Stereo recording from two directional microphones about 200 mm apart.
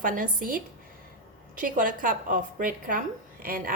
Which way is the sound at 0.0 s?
45° right (ahead or behind).